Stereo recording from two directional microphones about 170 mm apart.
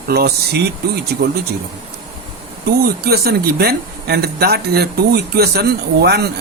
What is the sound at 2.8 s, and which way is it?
Speech, 70° right (ahead or behind).